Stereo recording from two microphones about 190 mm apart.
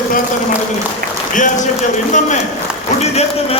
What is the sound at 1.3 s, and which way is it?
Speech, 40° left (ahead or behind).